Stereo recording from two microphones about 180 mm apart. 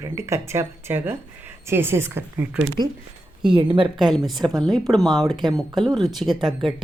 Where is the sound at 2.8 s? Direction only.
25° right (ahead or behind).